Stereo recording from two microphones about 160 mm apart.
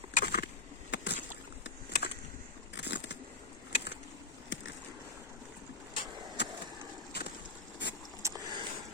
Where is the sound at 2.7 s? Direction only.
90° left.